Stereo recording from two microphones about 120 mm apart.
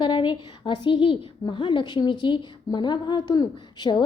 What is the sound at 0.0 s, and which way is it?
A woman's voice, 40° left (ahead or behind).